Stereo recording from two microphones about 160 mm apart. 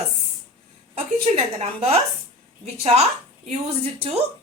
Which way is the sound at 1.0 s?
40° right (ahead or behind).